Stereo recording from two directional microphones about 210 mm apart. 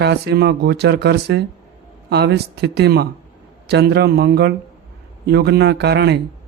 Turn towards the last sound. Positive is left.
turn(degrees=-50)  # may be behind; listen again after turning